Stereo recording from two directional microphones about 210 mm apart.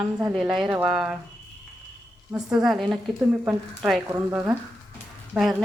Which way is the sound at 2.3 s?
5° right (ahead or behind).